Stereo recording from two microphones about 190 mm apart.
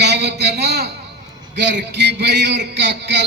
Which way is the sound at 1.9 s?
65° right (ahead or behind).